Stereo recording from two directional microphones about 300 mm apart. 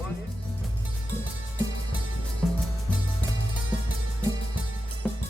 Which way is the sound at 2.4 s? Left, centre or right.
Centre.